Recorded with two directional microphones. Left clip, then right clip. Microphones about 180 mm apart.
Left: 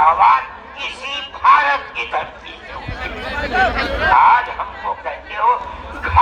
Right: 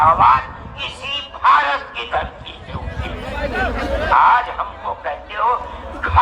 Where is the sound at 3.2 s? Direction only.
35° left (ahead or behind).